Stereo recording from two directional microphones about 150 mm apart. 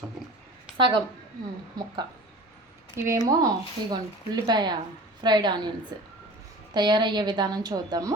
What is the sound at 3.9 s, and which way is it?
A woman's voice, 30° right (ahead or behind).